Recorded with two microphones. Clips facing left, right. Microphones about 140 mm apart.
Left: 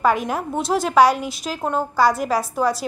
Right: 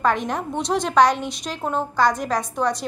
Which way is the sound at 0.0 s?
5° left (ahead or behind).